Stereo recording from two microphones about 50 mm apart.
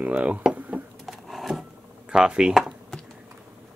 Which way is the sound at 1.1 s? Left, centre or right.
Centre.